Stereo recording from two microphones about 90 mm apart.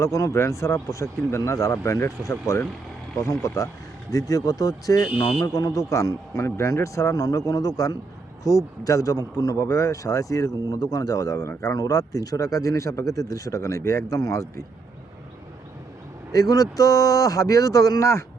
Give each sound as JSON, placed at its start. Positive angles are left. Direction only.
{"t": 0.0, "sound": "speech", "side_deg": 35}
{"t": 16.3, "sound": "speech", "side_deg": 40}